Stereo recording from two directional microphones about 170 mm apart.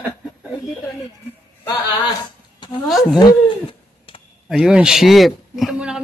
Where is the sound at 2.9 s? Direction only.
Centre (ahead or behind).